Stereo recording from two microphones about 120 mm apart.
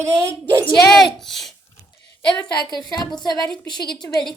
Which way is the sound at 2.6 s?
35° left (ahead or behind).